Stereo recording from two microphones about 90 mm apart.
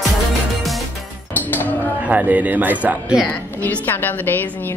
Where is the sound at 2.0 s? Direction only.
15° right (ahead or behind).